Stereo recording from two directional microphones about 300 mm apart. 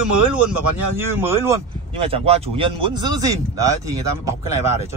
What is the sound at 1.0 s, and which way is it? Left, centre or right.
Speech, centre.